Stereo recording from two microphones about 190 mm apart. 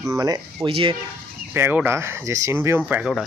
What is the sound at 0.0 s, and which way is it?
Speech, 15° right (ahead or behind).